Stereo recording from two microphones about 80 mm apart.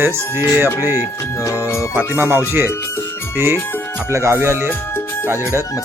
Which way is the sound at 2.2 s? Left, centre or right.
Right.